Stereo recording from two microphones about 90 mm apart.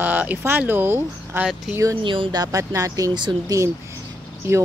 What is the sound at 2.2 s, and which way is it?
Speech, 40° right (ahead or behind).